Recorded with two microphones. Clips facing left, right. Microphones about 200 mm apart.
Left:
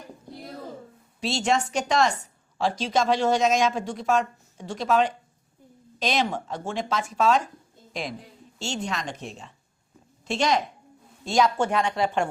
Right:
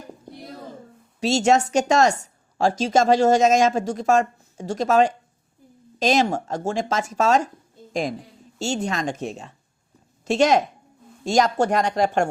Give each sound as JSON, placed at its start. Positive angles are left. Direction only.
{"t": 1.2, "sound": "a woman's voice", "side_deg": -45}
{"t": 8.5, "sound": "a woman's voice", "side_deg": -45}